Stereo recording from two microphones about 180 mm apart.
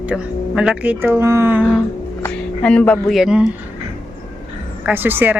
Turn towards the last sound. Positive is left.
turn(degrees=-10)  # may be behind; listen again after turning